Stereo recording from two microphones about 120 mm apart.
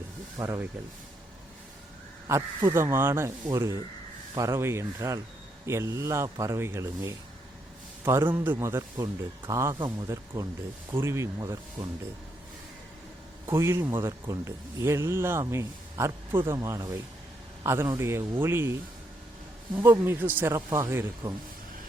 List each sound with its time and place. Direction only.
0.3 s speech: 25° right (ahead or behind)
2.3 s speech: 20° right (ahead or behind)
9.7 s speech: 40° right (ahead or behind)
10.1 s speech: 30° right (ahead or behind)
13.5 s a man's voice: 20° right (ahead or behind)